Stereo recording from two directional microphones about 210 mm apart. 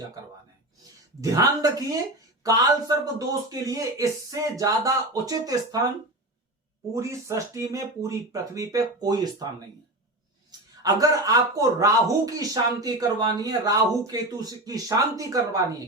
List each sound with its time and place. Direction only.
1.2 s speech: 15° right (ahead or behind)
6.9 s speech: 15° right (ahead or behind)
10.8 s speech: 15° right (ahead or behind)